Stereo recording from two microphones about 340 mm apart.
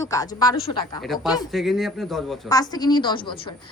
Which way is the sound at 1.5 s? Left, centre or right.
Centre.